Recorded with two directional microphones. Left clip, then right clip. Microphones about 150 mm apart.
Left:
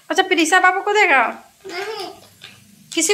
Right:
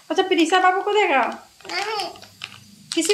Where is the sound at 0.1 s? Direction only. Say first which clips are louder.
Left 3 dB; centre (ahead or behind).